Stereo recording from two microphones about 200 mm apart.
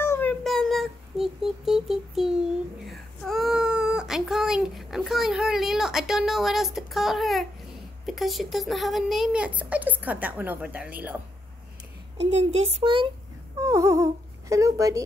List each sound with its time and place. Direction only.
0.0 s child singing: 10° left (ahead or behind)
2.8 s a sound: centre (ahead or behind)
8.1 s speech: centre (ahead or behind)
12.3 s a child's voice: 35° right (ahead or behind)
13.6 s speech: 15° right (ahead or behind)